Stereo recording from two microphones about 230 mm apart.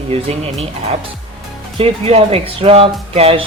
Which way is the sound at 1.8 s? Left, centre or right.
Right.